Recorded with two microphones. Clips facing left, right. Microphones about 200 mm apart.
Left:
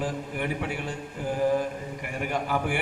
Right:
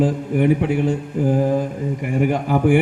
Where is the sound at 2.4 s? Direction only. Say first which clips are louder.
Right 13 dB; 45° right (ahead or behind).